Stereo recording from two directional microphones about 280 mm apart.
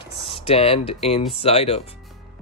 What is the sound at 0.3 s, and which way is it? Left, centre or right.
Speech, left.